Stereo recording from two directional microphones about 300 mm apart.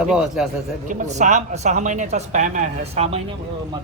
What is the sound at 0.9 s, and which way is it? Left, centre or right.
Speech, right.